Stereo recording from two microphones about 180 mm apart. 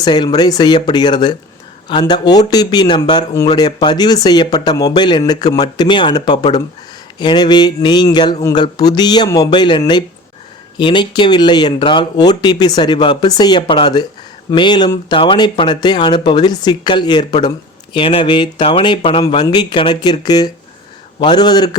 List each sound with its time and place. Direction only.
0.0 s speech: 25° left (ahead or behind)